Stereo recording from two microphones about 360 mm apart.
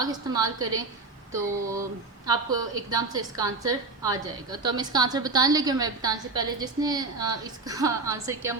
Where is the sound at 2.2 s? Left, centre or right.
Centre.